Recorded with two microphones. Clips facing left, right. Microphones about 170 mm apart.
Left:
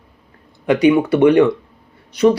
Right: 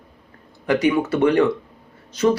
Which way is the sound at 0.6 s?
15° left (ahead or behind).